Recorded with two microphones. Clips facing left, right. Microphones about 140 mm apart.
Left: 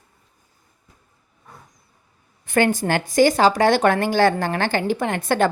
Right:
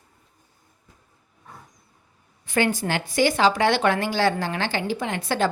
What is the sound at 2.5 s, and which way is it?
A woman's voice, 50° left (ahead or behind).